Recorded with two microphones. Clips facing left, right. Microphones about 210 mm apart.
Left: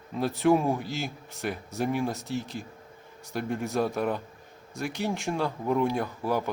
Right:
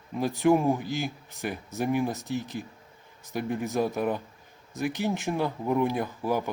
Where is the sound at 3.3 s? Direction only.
5° right (ahead or behind).